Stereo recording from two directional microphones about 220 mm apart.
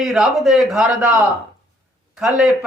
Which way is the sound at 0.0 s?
Centre (ahead or behind).